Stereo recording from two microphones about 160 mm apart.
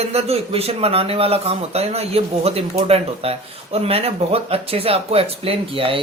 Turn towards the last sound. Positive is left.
turn(degrees=-35)  # may be behind; listen again after turning